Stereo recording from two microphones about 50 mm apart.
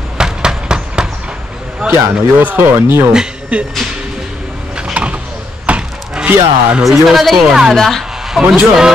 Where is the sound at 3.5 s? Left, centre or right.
Right.